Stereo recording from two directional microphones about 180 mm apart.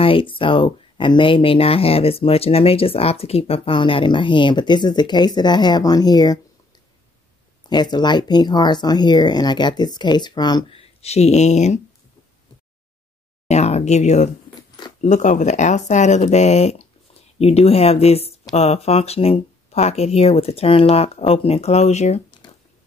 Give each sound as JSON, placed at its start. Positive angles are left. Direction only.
{"t": 0.0, "sound": "speech", "side_deg": 30}
{"t": 7.6, "sound": "speech", "side_deg": 25}
{"t": 13.5, "sound": "speech", "side_deg": 35}